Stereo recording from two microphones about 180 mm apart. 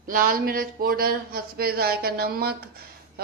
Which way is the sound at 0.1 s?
50° right (ahead or behind).